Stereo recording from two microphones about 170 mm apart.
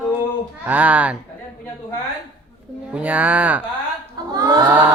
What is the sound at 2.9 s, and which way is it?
Speech, 10° right (ahead or behind).